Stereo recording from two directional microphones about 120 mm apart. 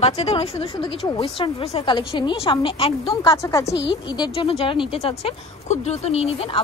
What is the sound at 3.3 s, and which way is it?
Speech, 25° left (ahead or behind).